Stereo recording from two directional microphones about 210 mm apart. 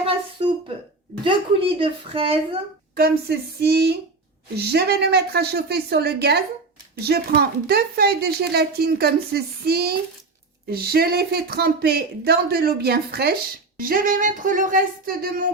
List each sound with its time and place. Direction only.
0.0 s a sound: 25° right (ahead or behind)
1.2 s a woman's voice: 25° right (ahead or behind)
2.9 s speech: 45° right (ahead or behind)